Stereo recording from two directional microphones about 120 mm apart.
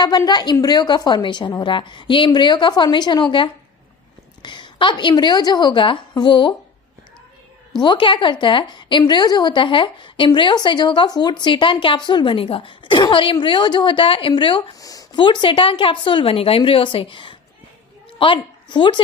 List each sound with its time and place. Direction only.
0.2 s a woman's voice: 35° left (ahead or behind)
7.8 s a woman's voice: 40° left (ahead or behind)
14.8 s a woman's voice: 30° left (ahead or behind)